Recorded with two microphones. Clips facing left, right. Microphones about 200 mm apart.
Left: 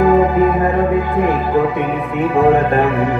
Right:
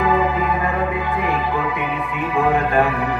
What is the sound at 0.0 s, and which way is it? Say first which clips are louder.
Music: left 7 dB; 45° left (ahead or behind).